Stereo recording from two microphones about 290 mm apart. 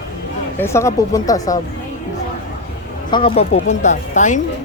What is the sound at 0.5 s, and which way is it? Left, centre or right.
Speech, centre.